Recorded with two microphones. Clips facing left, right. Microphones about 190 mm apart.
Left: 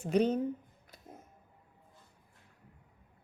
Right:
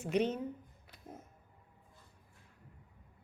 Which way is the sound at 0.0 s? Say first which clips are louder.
Left 4 dB; 35° left (ahead or behind).